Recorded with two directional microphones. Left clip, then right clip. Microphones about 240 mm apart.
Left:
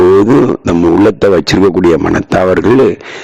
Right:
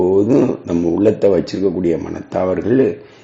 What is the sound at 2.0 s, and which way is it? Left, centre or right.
Speech, left.